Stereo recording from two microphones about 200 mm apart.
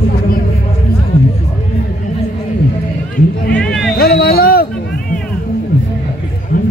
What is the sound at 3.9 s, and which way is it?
Vehicle, 50° left (ahead or behind).